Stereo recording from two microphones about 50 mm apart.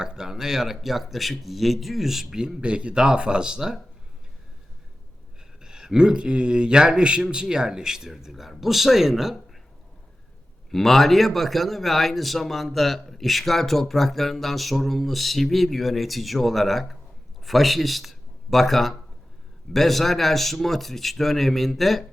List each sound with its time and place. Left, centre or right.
0.0 s a man's voice: centre
2.4 s a man's voice: centre
5.6 s a man's voice: centre
10.7 s a man's voice: centre